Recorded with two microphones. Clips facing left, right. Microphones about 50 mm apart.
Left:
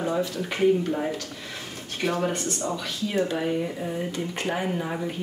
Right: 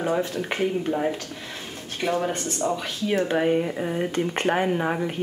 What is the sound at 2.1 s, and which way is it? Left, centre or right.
Speech, centre.